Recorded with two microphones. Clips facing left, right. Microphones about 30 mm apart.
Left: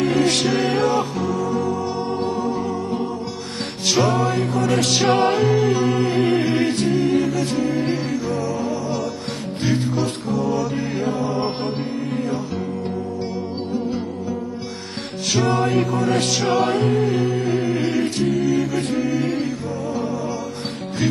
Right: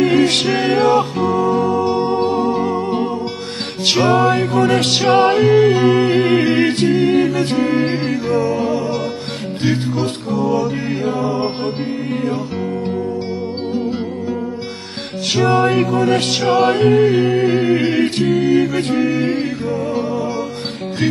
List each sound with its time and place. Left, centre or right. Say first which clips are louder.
0.0 s music: right 4 dB; right
15.3 s music: right 5 dB; right